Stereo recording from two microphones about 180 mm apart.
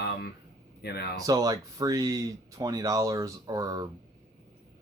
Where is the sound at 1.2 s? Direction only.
20° right (ahead or behind).